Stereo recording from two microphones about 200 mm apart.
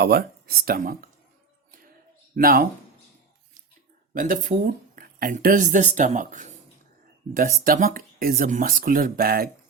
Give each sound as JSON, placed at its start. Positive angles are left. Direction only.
{"t": 0.0, "sound": "speech", "side_deg": -50}
{"t": 2.3, "sound": "speech", "side_deg": -45}
{"t": 4.1, "sound": "speech", "side_deg": -45}